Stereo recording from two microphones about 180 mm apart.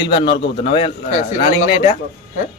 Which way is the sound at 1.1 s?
45° left (ahead or behind).